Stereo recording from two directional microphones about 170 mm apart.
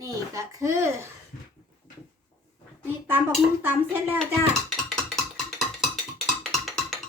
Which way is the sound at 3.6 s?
10° right (ahead or behind).